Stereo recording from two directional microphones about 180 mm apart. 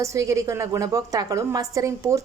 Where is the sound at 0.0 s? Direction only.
15° right (ahead or behind).